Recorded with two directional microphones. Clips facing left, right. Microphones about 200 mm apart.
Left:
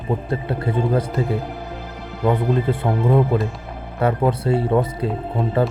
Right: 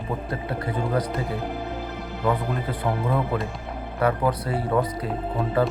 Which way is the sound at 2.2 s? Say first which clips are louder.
Left 7 dB; 25° left (ahead or behind).